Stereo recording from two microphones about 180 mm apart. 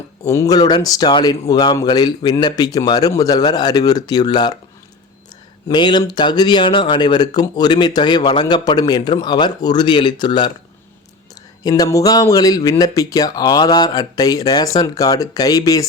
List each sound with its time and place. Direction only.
0.3 s speech: 20° left (ahead or behind)
5.6 s speech: 25° left (ahead or behind)
11.6 s speech: 20° left (ahead or behind)